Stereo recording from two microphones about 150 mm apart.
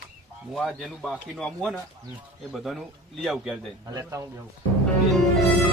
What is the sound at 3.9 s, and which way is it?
Speech, 20° right (ahead or behind).